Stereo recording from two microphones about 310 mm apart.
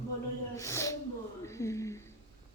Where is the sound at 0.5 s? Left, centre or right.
Centre.